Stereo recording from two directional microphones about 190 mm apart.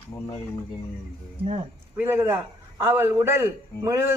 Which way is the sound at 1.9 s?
10° right (ahead or behind).